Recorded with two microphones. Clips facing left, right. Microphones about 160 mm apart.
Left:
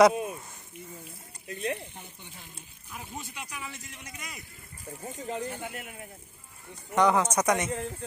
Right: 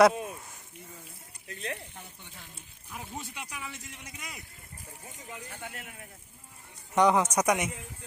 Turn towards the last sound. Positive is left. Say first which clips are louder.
# left 9 dB
turn(degrees=80)